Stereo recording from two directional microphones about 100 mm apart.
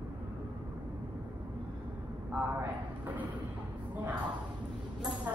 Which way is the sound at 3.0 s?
15° right (ahead or behind).